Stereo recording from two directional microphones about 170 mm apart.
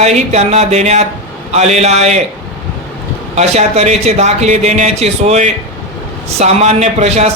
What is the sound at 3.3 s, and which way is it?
Speech, 40° right (ahead or behind).